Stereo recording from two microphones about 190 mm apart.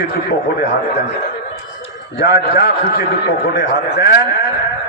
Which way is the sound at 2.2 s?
60° left (ahead or behind).